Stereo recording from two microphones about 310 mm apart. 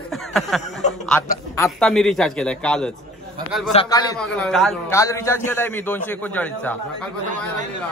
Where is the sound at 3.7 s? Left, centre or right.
Centre.